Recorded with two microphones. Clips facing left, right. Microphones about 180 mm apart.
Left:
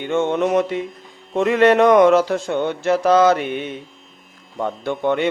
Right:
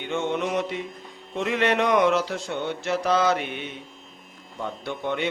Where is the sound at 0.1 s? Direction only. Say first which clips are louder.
Left 8 dB; 50° left (ahead or behind).